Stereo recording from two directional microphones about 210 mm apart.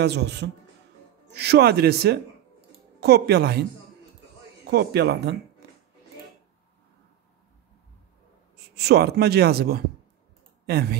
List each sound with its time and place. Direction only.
0.0 s speech: 55° right (ahead or behind)
4.6 s speech: 50° right (ahead or behind)
8.7 s speech: 50° right (ahead or behind)